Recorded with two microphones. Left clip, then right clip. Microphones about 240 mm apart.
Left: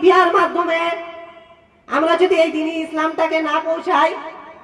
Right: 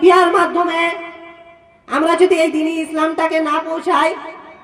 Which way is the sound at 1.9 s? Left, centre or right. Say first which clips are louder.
Right 2 dB; right.